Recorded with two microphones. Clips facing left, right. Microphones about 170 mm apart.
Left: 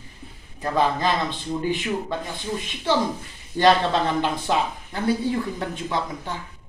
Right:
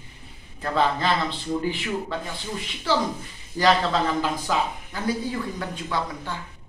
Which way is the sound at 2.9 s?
20° left (ahead or behind).